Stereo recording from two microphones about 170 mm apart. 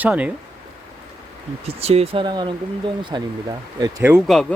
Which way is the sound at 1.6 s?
35° right (ahead or behind).